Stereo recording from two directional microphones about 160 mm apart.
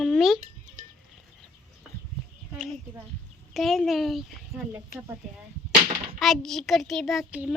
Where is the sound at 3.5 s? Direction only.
Centre (ahead or behind).